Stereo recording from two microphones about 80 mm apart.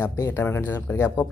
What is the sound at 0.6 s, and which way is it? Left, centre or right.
Speech, left.